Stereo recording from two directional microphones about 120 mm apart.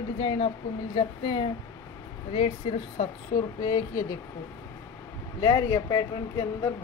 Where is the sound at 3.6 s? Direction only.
30° left (ahead or behind).